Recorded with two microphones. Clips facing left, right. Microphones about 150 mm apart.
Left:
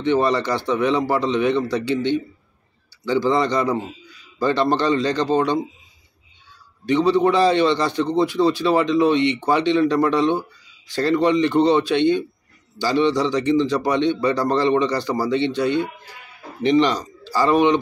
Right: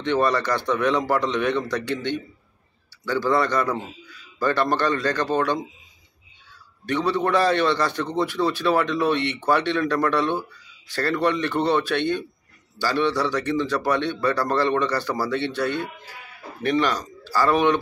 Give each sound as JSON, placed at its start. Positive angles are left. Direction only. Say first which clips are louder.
{"t": 0.0, "sound": "a man's voice", "louder": "left 3 dB", "side_deg": 10}
{"t": 6.9, "sound": "a man's voice", "louder": "left 5 dB", "side_deg": 15}